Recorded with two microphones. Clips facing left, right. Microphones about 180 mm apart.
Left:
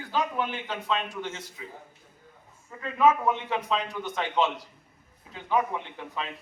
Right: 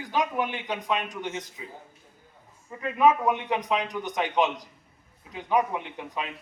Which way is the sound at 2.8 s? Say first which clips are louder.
Right 1 dB; 15° right (ahead or behind).